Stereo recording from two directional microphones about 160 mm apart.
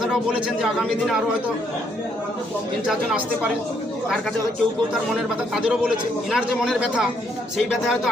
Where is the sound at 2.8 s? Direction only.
5° right (ahead or behind).